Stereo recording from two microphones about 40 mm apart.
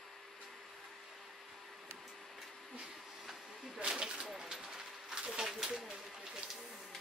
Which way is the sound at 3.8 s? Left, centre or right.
Centre.